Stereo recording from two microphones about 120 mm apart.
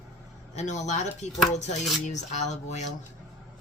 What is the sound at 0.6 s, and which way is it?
Speech, 80° left.